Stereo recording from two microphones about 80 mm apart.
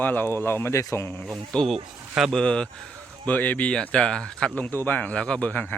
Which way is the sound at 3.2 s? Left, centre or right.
Left.